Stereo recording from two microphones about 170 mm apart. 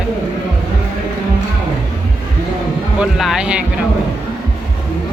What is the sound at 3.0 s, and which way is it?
Speech, 5° right (ahead or behind).